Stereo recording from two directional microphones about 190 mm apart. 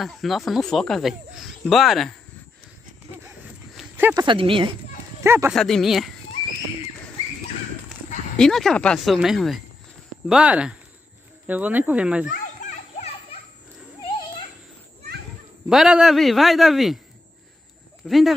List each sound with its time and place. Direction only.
0.0 s speech: centre (ahead or behind)
3.7 s speech: 10° right (ahead or behind); by 4.7 s 25° right (ahead or behind)
5.2 s speech: 15° right (ahead or behind)
5.5 s speech: centre (ahead or behind)
8.4 s speech: centre (ahead or behind)
12.3 s children playing: 45° left (ahead or behind)
15.7 s speech: 5° right (ahead or behind)
18.0 s speech: centre (ahead or behind)